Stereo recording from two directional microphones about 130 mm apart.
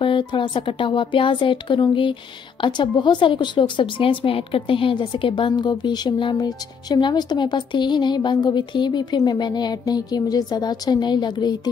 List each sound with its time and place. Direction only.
0.0 s a woman's voice: 40° left (ahead or behind)